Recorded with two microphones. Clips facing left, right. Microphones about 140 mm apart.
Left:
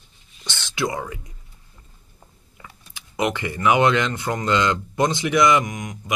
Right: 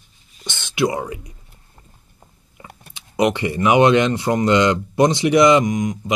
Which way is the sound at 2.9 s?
20° right (ahead or behind).